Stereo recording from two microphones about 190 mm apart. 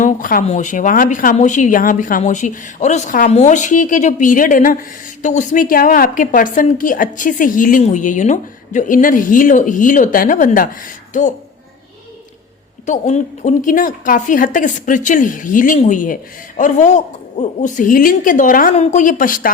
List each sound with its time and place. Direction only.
0.0 s a sound: 45° left (ahead or behind)
0.4 s speech: 40° left (ahead or behind)
12.8 s speech: 40° left (ahead or behind)
18.7 s speech: 35° left (ahead or behind)